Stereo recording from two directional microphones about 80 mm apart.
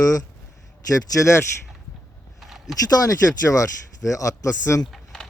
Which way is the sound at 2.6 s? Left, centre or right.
Left.